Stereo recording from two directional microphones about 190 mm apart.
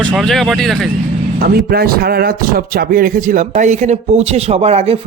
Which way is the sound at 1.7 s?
55° right (ahead or behind).